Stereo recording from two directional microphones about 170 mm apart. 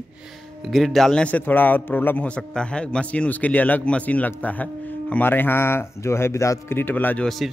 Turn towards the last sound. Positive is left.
turn(degrees=0)  # may be behind; listen again after turning